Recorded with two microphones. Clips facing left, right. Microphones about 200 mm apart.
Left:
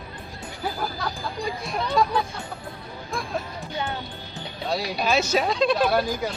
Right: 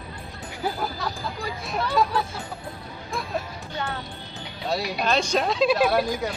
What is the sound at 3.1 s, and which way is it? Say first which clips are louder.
Music: even; centre (ahead or behind).